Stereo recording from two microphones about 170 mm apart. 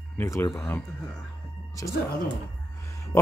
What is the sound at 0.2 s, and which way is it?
Speech, 15° left (ahead or behind).